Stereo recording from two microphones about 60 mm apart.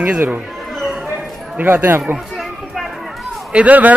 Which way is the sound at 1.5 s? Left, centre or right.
Right.